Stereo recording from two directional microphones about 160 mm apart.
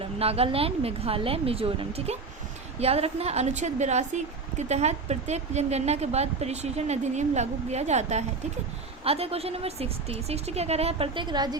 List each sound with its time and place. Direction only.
0.0 s a woman's voice: 40° right (ahead or behind)